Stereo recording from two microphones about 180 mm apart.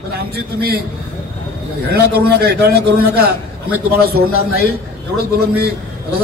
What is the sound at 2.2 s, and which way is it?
Speech, 65° right (ahead or behind).